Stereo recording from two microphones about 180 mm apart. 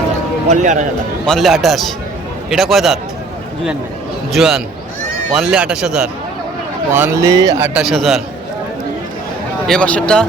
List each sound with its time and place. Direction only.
0.4 s speech: 40° right (ahead or behind)
1.3 s speech: centre (ahead or behind)
4.3 s speech: centre (ahead or behind)
7.0 s speech: 15° right (ahead or behind)
7.7 s speech: 5° right (ahead or behind)
9.6 s speech: 5° left (ahead or behind)